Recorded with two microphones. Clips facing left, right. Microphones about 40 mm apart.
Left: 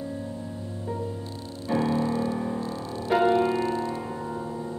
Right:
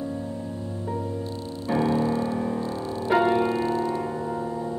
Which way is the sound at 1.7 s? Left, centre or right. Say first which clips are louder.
Right 2 dB; centre.